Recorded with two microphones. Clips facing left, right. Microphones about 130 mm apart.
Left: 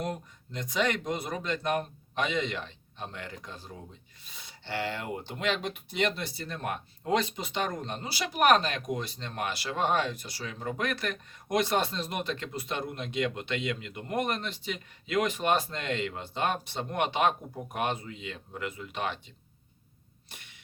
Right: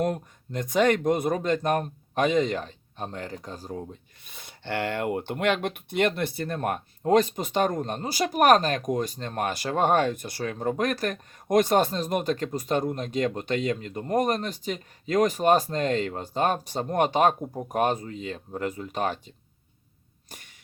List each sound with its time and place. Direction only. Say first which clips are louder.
0.0 s speech: right 8 dB; 50° right (ahead or behind)
4.3 s speech: right 5 dB; 55° right (ahead or behind)